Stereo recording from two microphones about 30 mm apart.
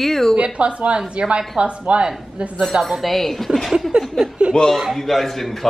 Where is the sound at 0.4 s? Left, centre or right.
Right.